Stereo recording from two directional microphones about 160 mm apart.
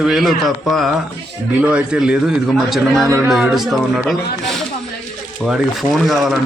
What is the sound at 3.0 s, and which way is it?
Speech, 20° right (ahead or behind).